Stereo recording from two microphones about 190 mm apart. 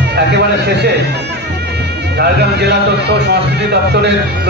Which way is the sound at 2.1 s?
60° right (ahead or behind).